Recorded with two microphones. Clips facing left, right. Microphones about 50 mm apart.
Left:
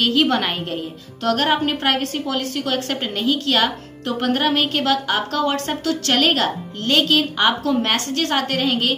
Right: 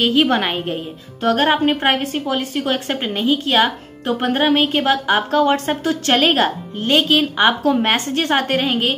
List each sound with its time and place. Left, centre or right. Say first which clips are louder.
0.0 s a woman's voice: right 2 dB; centre